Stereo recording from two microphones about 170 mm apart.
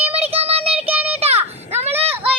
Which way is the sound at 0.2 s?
35° right (ahead or behind).